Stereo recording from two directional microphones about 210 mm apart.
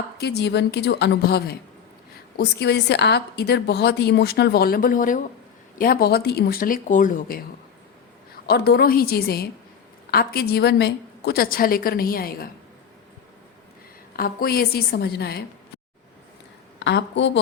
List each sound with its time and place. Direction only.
0.2 s a woman's voice: 50° left (ahead or behind)
8.4 s a woman's voice: 50° left (ahead or behind)
14.2 s a woman's voice: 45° left (ahead or behind)
16.8 s a woman's voice: 60° left (ahead or behind)